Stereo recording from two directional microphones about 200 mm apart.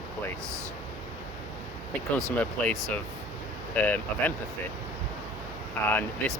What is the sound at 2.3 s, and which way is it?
Speech, 5° left (ahead or behind).